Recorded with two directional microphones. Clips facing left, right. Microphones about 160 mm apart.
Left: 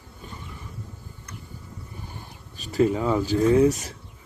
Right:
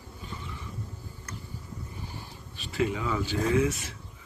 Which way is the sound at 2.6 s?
40° left (ahead or behind).